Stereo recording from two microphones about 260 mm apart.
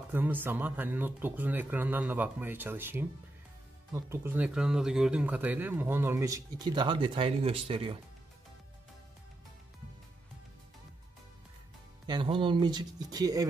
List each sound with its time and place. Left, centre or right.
0.1 s speech: centre
12.1 s speech: centre